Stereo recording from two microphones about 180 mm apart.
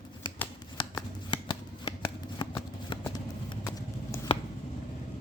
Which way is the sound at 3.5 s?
20° left (ahead or behind).